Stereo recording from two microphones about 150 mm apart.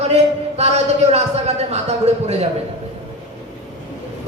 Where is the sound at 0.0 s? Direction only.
45° right (ahead or behind).